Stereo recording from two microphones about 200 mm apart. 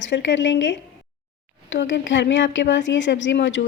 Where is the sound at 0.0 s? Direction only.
65° left (ahead or behind).